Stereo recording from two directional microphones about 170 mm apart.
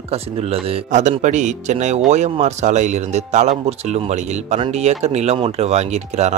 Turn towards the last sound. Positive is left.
turn(degrees=-40)  # may be behind; listen again after turning